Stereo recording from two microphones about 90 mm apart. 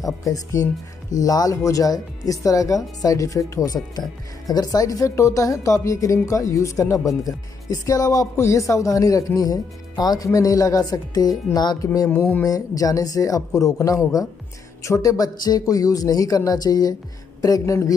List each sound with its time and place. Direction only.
0.0 s speech: 40° left (ahead or behind)
3.7 s speech: 50° left (ahead or behind)
12.1 s speech: 20° left (ahead or behind)
12.4 s speech: 40° left (ahead or behind)